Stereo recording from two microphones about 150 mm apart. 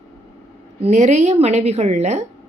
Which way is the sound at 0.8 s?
50° right (ahead or behind).